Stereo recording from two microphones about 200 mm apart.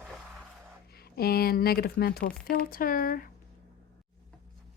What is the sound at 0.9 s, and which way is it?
Speech, 50° left (ahead or behind).